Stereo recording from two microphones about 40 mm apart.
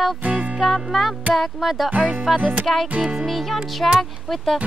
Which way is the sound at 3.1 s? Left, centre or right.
Centre.